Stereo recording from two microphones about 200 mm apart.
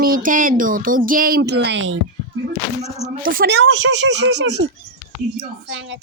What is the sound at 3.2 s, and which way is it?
Speech, 50° right (ahead or behind).